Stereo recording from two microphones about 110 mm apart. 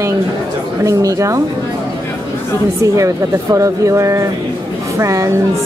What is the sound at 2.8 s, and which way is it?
A woman's voice, 30° right (ahead or behind).